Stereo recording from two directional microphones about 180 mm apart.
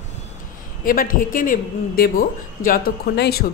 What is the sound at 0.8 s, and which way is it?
A man's voice, 50° left (ahead or behind).